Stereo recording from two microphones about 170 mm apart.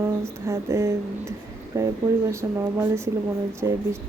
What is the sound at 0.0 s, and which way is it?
Speech, 15° right (ahead or behind).